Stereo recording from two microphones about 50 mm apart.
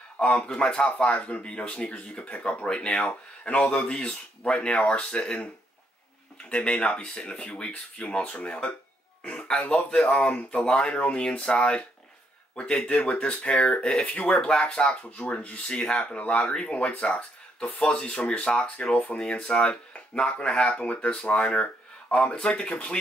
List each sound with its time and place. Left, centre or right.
0.2 s speech: left
6.5 s speech: left
17.8 s speech: centre